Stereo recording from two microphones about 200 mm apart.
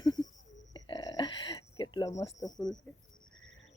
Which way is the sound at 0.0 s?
20° left (ahead or behind).